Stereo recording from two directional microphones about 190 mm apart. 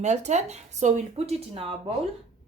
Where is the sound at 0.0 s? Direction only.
35° right (ahead or behind).